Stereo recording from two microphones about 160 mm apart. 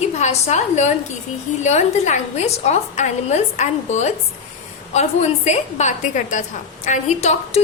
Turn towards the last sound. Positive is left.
turn(degrees=45)  # may be behind; listen again after turning